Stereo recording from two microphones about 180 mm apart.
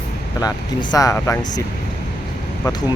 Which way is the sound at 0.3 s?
25° left (ahead or behind).